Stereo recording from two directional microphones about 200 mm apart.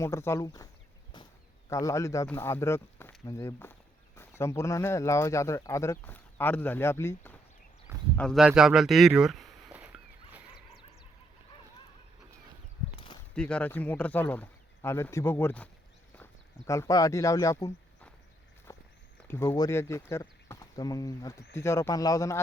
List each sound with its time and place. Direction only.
0.0 s speech: 15° left (ahead or behind)
1.7 s speech: 15° left (ahead or behind)
3.2 s a sound: 15° left (ahead or behind)
4.4 s speech: 15° left (ahead or behind)
8.2 s speech: centre (ahead or behind)
13.3 s speech: 5° left (ahead or behind)
18.7 s walk: 15° left (ahead or behind)
19.3 s speech: 15° left (ahead or behind)